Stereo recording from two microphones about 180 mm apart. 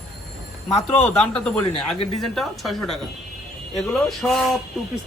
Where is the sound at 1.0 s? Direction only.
5° left (ahead or behind).